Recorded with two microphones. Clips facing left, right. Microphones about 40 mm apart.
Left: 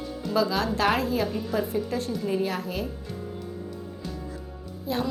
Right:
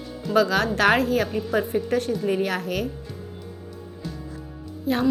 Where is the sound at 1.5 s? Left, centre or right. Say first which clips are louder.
Right 4 dB; right.